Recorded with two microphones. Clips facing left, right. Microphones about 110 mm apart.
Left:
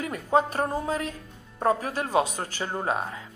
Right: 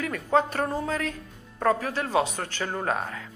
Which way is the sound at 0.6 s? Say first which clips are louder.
Even; 15° left (ahead or behind).